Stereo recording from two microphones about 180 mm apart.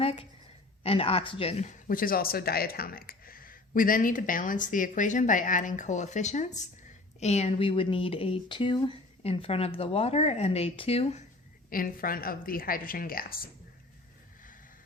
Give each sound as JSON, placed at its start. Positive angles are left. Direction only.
{"t": 0.0, "sound": "a woman's voice", "side_deg": 35}
{"t": 1.9, "sound": "speech", "side_deg": 50}
{"t": 11.7, "sound": "speech", "side_deg": 50}